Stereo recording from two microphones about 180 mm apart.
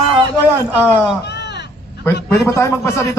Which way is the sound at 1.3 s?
70° left (ahead or behind).